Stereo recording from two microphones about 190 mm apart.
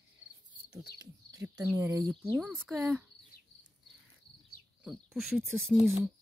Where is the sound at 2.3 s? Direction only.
Centre (ahead or behind).